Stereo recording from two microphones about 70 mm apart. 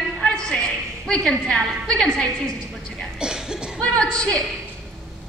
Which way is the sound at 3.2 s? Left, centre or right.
Centre.